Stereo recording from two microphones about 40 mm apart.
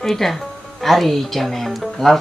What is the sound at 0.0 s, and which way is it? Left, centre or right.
Music, centre.